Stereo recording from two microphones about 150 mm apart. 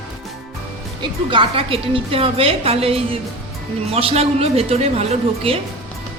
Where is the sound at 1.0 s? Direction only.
35° right (ahead or behind).